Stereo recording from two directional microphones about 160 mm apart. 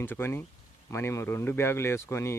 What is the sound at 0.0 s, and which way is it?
Speech, 15° left (ahead or behind).